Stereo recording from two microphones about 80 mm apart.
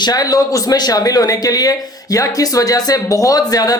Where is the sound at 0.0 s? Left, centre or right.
Left.